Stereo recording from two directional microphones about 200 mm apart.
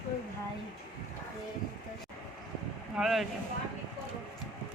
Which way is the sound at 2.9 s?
Centre (ahead or behind).